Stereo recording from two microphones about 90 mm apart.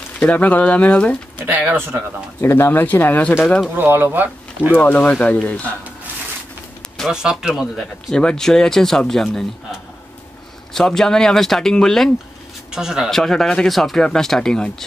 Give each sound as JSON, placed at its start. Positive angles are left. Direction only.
{"t": 0.2, "sound": "speech", "side_deg": 20}
{"t": 1.4, "sound": "speech", "side_deg": -20}
{"t": 2.4, "sound": "speech", "side_deg": 25}
{"t": 3.7, "sound": "speech", "side_deg": -20}
{"t": 4.7, "sound": "speech", "side_deg": 15}
{"t": 7.1, "sound": "speech", "side_deg": -5}
{"t": 8.2, "sound": "speech", "side_deg": 10}
{"t": 10.7, "sound": "speech", "side_deg": 5}
{"t": 12.7, "sound": "speech", "side_deg": -5}
{"t": 13.1, "sound": "speech", "side_deg": 5}